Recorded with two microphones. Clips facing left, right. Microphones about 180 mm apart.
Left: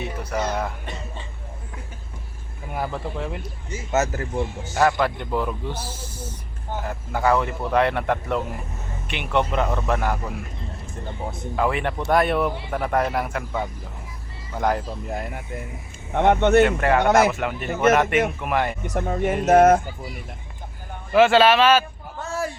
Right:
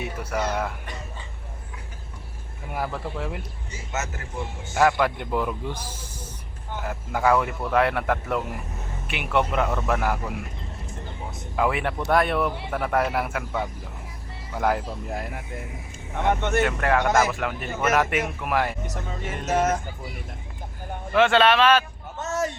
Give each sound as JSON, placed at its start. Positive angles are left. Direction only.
{"t": 0.0, "sound": "speech", "side_deg": -10}
{"t": 3.2, "sound": "a man's voice", "side_deg": -5}
{"t": 3.7, "sound": "speech", "side_deg": 35}
{"t": 4.7, "sound": "a man's voice", "side_deg": 0}
{"t": 5.7, "sound": "speech", "side_deg": 10}
{"t": 6.8, "sound": "a man's voice", "side_deg": -10}
{"t": 11.5, "sound": "a man's voice", "side_deg": -5}
{"t": 16.1, "sound": "speech", "side_deg": 60}
{"t": 16.6, "sound": "a man's voice", "side_deg": 0}
{"t": 18.9, "sound": "speech", "side_deg": 55}
{"t": 21.1, "sound": "a man's voice", "side_deg": 5}
{"t": 22.2, "sound": "a sound", "side_deg": -20}